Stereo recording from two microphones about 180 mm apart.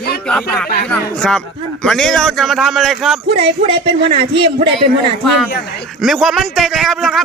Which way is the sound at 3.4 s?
30° right (ahead or behind).